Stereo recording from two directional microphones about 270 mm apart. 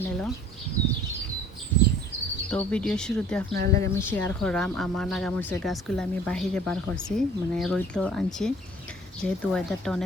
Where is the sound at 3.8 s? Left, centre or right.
Centre.